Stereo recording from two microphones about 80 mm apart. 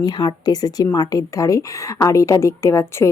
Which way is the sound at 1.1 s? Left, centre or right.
Left.